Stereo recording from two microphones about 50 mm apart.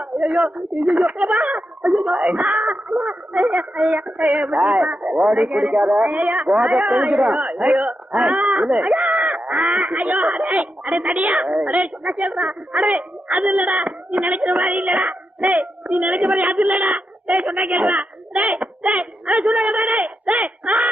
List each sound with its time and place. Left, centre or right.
0.0 s speech: right